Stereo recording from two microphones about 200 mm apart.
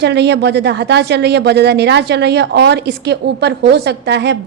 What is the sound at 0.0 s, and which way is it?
Speech, 60° right (ahead or behind).